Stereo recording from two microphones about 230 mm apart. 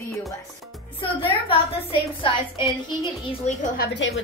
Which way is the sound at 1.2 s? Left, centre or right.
Left.